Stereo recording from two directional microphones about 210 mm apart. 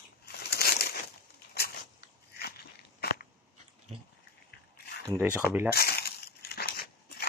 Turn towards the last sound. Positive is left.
turn(degrees=50)  # may be behind; listen again after turning